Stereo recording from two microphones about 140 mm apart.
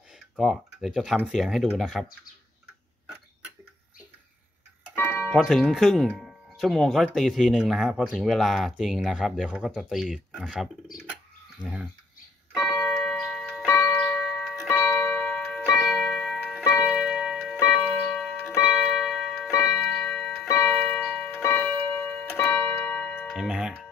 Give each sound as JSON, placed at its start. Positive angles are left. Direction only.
{"t": 0.4, "sound": "speech", "side_deg": 0}
{"t": 4.9, "sound": "music", "side_deg": 15}
{"t": 5.3, "sound": "speech", "side_deg": 0}
{"t": 12.5, "sound": "clock", "side_deg": 0}
{"t": 14.7, "sound": "music", "side_deg": 15}
{"t": 16.8, "sound": "music", "side_deg": -5}
{"t": 17.9, "sound": "clock", "side_deg": 5}
{"t": 18.6, "sound": "music", "side_deg": -5}
{"t": 19.4, "sound": "clock", "side_deg": -5}
{"t": 23.3, "sound": "music", "side_deg": -5}